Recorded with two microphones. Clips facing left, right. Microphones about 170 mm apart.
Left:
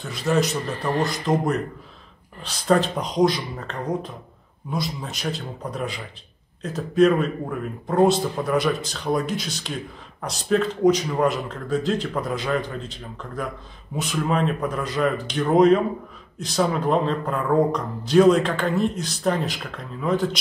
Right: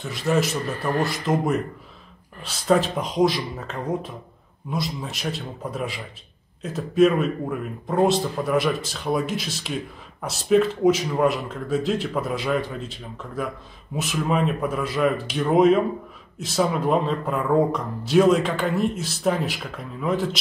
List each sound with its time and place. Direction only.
0.0 s speech: centre (ahead or behind)
0.7 s a man's voice: 20° left (ahead or behind)
1.0 s speech: centre (ahead or behind)